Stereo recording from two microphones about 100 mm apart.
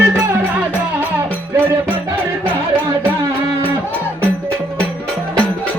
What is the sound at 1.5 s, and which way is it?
Music, 20° right (ahead or behind).